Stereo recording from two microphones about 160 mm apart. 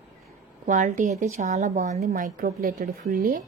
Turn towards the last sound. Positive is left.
turn(degrees=-60)  # may be behind; listen again after turning